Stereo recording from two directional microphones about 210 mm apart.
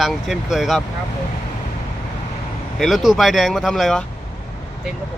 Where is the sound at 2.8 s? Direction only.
Centre (ahead or behind).